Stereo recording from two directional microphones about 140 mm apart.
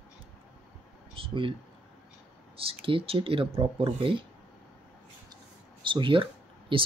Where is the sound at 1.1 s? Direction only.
40° right (ahead or behind).